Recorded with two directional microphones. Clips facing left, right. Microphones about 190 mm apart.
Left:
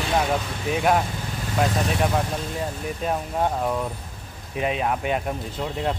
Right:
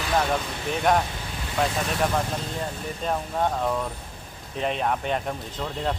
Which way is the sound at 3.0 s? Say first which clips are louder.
Left 1 dB; 10° left (ahead or behind).